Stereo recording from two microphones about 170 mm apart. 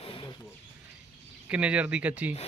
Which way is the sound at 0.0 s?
35° left (ahead or behind).